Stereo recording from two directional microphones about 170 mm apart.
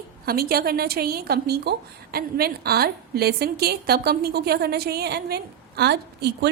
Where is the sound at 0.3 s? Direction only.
65° right (ahead or behind).